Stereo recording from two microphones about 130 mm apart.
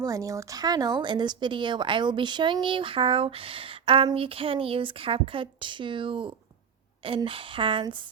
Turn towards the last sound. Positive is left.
turn(degrees=-40)  # may be behind; listen again after turning